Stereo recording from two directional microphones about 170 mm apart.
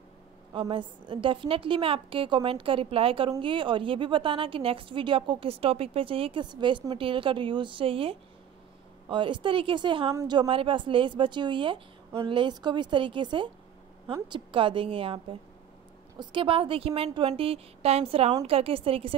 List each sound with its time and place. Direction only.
0.5 s a woman's voice: 30° right (ahead or behind)